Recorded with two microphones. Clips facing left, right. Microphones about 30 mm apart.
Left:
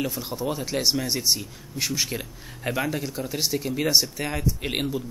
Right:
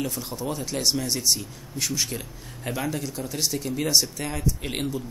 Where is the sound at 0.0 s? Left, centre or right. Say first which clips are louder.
Left 2 dB; centre.